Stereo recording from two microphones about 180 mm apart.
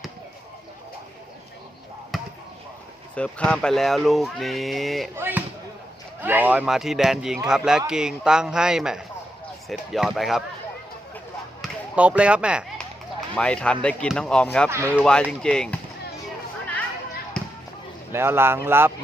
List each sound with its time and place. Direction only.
2.1 s basketball bounce: centre (ahead or behind)
3.2 s speech: 5° left (ahead or behind)
5.1 s speech: 10° right (ahead or behind)
11.6 s basketball bounce: 5° right (ahead or behind)
13.3 s speech: 5° left (ahead or behind)
14.7 s speech: 15° right (ahead or behind)
14.9 s speech: 5° left (ahead or behind)
17.4 s basketball bounce: 5° left (ahead or behind)
18.1 s speech: 15° right (ahead or behind)